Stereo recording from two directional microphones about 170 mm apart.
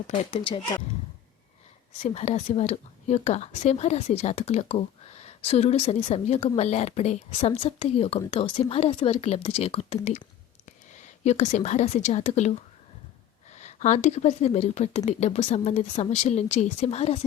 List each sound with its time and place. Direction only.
0.3 s speech: 35° left (ahead or behind)
2.0 s speech: 40° left (ahead or behind)